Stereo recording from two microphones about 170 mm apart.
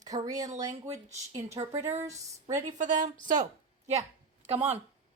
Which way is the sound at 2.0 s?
20° right (ahead or behind).